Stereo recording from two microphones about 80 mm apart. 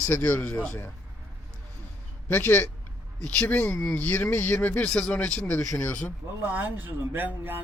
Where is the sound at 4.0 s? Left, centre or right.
Left.